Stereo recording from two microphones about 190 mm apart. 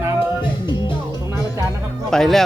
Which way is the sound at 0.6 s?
25° left (ahead or behind).